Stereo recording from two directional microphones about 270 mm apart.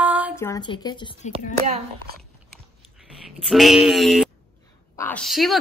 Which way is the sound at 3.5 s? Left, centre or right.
Centre.